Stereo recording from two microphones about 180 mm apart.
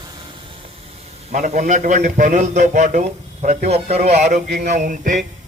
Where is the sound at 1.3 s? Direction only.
45° right (ahead or behind).